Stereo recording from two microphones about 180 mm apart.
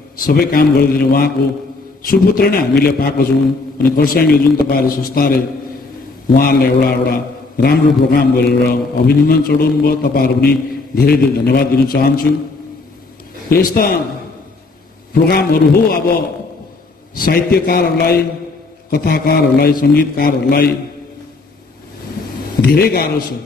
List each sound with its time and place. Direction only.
0.2 s a man's voice: 55° left (ahead or behind)
13.5 s a man's voice: 55° left (ahead or behind)
15.2 s a man's voice: 55° left (ahead or behind)
22.7 s a man's voice: 60° left (ahead or behind)